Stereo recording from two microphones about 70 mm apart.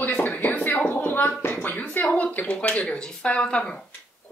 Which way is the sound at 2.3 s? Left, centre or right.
Centre.